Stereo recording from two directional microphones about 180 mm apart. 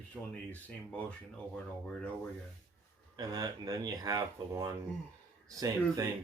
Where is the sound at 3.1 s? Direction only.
20° right (ahead or behind).